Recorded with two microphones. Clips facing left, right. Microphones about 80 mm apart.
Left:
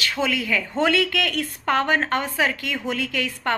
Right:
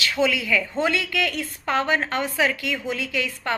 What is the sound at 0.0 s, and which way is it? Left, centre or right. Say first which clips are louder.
Speech: right 2 dB; left.